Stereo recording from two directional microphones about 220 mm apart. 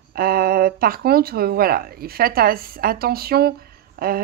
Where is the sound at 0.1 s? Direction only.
45° right (ahead or behind).